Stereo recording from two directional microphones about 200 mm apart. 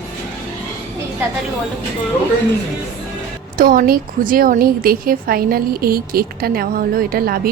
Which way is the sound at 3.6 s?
45° right (ahead or behind).